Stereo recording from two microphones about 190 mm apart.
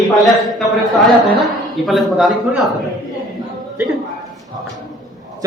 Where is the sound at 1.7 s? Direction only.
Centre (ahead or behind).